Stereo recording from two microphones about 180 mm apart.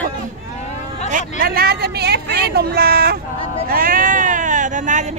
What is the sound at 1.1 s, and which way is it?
Speech, 55° right (ahead or behind).